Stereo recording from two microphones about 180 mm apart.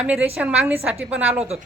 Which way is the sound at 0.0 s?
10° right (ahead or behind).